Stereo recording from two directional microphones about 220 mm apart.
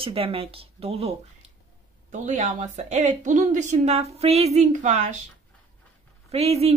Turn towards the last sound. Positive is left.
turn(degrees=-25)  # may be behind; listen again after turning